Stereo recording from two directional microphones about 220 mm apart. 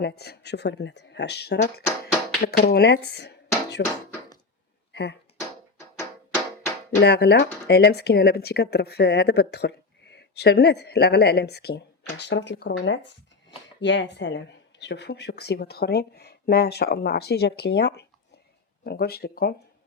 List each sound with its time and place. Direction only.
0.0 s speech: 45° left (ahead or behind)
4.9 s a sound: 50° left (ahead or behind)
7.0 s speech: 50° left (ahead or behind)